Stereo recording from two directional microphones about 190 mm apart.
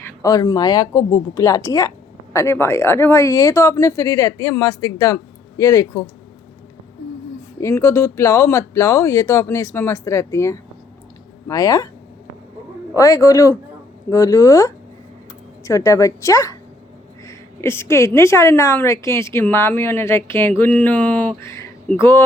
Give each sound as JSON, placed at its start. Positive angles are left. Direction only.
{"t": 0.0, "sound": "speech", "side_deg": 15}
{"t": 7.6, "sound": "speech", "side_deg": 15}
{"t": 13.0, "sound": "speech", "side_deg": 15}